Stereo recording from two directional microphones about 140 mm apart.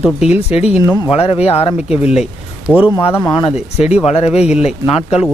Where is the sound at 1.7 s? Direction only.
10° right (ahead or behind).